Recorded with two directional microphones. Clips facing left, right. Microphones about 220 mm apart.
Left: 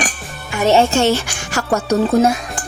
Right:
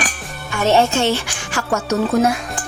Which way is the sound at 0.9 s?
40° left (ahead or behind).